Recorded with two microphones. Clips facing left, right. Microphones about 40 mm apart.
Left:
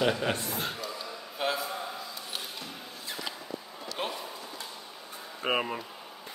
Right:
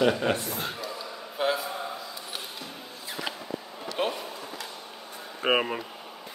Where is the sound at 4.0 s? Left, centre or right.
Right.